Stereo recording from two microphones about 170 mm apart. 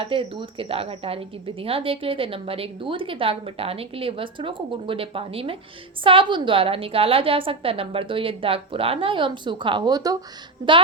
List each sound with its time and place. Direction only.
0.0 s a woman's voice: 30° right (ahead or behind)